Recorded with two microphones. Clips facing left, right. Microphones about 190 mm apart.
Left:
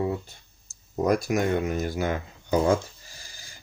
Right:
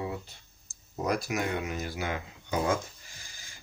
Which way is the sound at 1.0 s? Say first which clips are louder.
Left 7 dB; 45° left (ahead or behind).